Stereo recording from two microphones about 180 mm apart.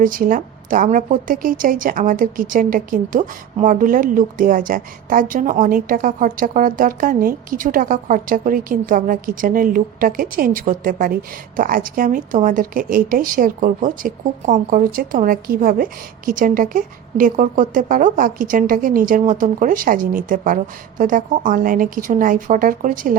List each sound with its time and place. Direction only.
0.0 s a woman's voice: 50° right (ahead or behind)